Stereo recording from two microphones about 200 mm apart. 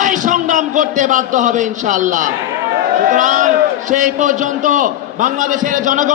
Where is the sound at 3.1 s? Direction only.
40° right (ahead or behind).